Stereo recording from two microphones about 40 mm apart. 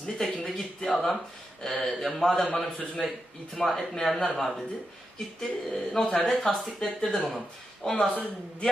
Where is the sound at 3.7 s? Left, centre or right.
Centre.